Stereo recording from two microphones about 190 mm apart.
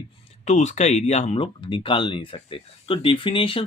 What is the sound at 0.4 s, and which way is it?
Speech, 35° left (ahead or behind).